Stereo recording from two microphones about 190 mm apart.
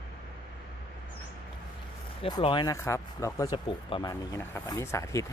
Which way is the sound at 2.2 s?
25° left (ahead or behind).